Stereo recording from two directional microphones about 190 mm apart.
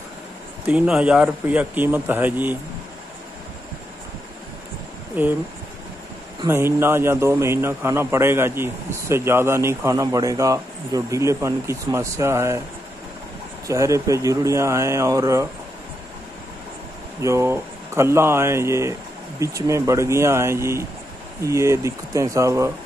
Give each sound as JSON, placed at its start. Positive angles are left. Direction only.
{"t": 0.7, "sound": "speech", "side_deg": -5}
{"t": 5.2, "sound": "speech", "side_deg": -10}
{"t": 6.4, "sound": "speech", "side_deg": -10}
{"t": 13.7, "sound": "speech", "side_deg": -15}
{"t": 17.2, "sound": "speech", "side_deg": -15}